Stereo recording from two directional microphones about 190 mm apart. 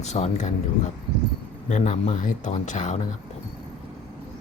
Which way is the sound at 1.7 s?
40° left (ahead or behind).